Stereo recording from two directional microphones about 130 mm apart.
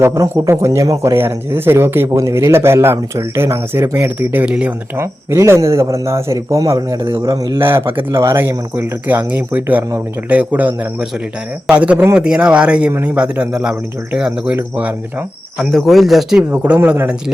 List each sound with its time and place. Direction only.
0.0 s a man's voice: 25° right (ahead or behind)
4.9 s a man's voice: 20° right (ahead or behind)
7.6 s speech: 15° right (ahead or behind)
11.7 s speech: 10° right (ahead or behind)
15.5 s speech: centre (ahead or behind)
16.4 s speech: 10° right (ahead or behind)